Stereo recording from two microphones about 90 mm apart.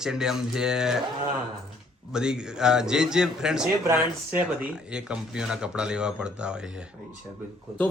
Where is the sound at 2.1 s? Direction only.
10° right (ahead or behind).